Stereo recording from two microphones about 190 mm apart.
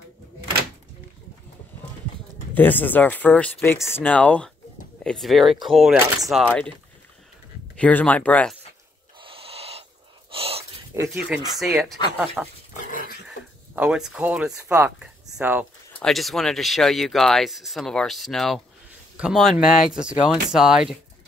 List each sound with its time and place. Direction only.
2.5 s speech: 10° left (ahead or behind)
7.7 s speech: 5° left (ahead or behind)
9.2 s owl: 30° right (ahead or behind)
10.3 s dog: 30° right (ahead or behind)
11.0 s speech: 10° right (ahead or behind)
13.7 s speech: 5° right (ahead or behind)
19.5 s speech: 45° left (ahead or behind)
20.0 s speech: 5° right (ahead or behind)